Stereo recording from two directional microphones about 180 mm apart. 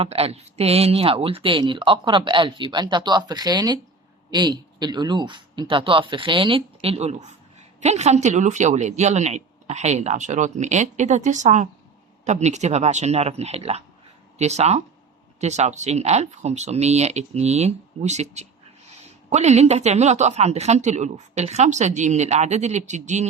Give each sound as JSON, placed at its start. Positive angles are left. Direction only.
{"t": 0.0, "sound": "a woman's voice", "side_deg": -35}